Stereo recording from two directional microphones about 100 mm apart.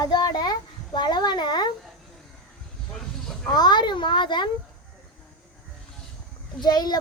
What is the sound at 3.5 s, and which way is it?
Speech, 45° left (ahead or behind).